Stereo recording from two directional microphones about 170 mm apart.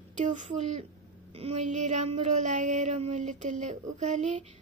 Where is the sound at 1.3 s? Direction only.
40° right (ahead or behind).